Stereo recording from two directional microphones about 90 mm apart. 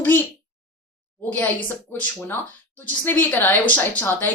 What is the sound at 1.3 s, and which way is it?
Speech, 20° left (ahead or behind).